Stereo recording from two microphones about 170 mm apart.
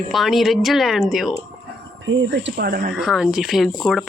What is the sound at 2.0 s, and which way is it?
Speech, 90° right.